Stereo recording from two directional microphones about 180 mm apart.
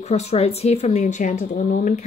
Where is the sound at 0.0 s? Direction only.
35° left (ahead or behind).